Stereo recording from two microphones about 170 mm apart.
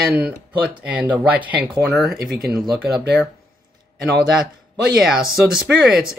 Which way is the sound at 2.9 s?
5° right (ahead or behind).